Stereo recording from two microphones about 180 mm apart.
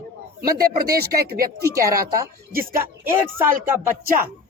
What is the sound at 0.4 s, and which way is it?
Speech, 55° right (ahead or behind).